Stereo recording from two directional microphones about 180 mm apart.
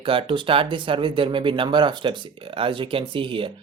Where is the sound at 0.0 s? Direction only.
30° right (ahead or behind).